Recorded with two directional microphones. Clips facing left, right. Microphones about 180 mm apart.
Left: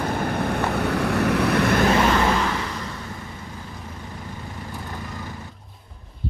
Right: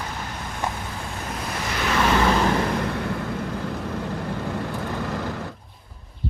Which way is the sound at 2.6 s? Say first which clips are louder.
Right 8 dB; 60° right (ahead or behind).